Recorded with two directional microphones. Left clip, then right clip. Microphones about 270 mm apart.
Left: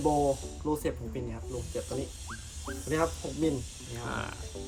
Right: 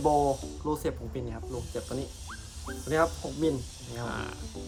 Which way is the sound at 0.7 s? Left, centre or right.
Centre.